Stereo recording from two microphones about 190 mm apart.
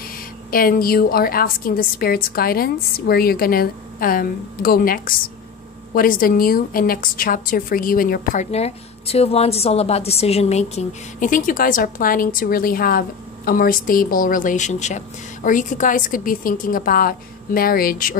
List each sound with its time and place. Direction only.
0.5 s a woman's voice: 50° left (ahead or behind)
8.5 s a woman's voice: 35° left (ahead or behind); by 18.1 s 50° left (ahead or behind)